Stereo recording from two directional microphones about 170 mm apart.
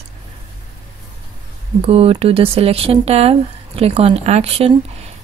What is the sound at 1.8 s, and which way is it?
Speech, 35° right (ahead or behind).